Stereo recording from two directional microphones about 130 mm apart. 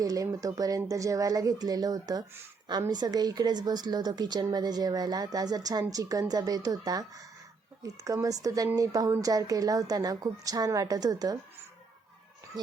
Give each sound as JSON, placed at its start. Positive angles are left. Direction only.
{"t": 0.0, "sound": "a woman's voice", "side_deg": -25}